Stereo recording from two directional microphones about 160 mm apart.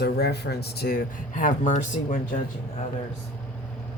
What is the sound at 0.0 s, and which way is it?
Speech, 90° left.